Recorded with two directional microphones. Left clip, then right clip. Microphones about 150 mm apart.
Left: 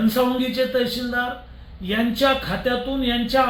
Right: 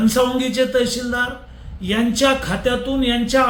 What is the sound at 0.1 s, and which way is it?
A man's voice, 10° right (ahead or behind).